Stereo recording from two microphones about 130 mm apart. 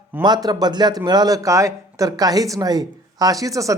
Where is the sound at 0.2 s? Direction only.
30° right (ahead or behind).